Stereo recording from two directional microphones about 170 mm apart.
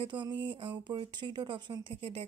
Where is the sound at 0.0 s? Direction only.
30° right (ahead or behind).